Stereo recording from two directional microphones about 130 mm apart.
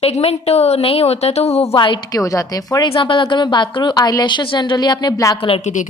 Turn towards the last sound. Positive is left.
turn(degrees=30)  # may be behind; listen again after turning